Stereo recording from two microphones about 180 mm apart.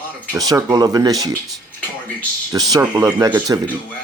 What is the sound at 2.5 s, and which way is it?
Speech, 20° right (ahead or behind).